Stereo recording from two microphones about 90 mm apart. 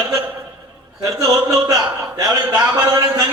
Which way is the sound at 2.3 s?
15° right (ahead or behind).